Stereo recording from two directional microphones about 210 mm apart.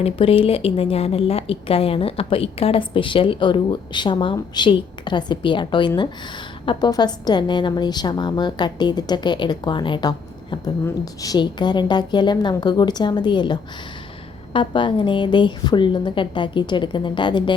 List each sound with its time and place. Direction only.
0.0 s a woman's voice: 25° left (ahead or behind)